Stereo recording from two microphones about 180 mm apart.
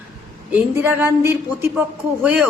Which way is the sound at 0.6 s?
10° right (ahead or behind).